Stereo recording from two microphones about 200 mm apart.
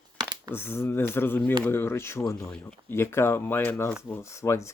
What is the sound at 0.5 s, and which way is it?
Speech, 10° left (ahead or behind).